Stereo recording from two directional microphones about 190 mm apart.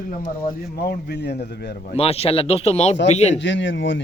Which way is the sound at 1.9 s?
30° left (ahead or behind).